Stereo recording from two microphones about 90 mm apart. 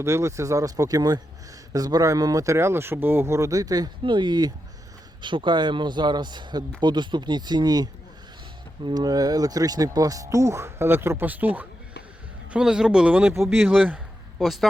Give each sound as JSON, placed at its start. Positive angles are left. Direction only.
{"t": 0.0, "sound": "speech", "side_deg": -30}
{"t": 4.0, "sound": "a man's voice", "side_deg": -60}
{"t": 5.2, "sound": "a man's voice", "side_deg": -60}
{"t": 14.3, "sound": "speech", "side_deg": 0}